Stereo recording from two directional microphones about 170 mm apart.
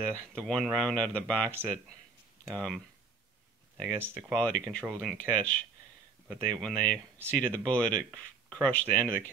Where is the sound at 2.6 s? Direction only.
5° left (ahead or behind).